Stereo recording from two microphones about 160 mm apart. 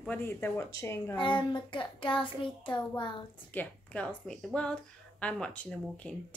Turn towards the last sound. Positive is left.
turn(degrees=5)  # may be behind; listen again after turning